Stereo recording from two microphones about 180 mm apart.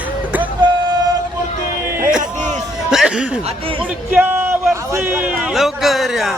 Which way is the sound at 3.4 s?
30° right (ahead or behind).